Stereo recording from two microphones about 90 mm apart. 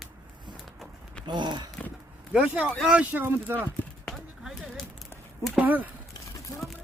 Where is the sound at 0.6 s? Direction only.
Centre (ahead or behind).